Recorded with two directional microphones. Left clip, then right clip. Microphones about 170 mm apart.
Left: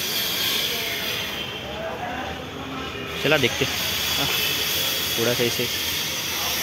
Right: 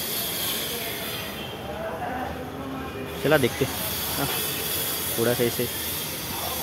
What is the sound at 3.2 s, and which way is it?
Speech, 20° right (ahead or behind).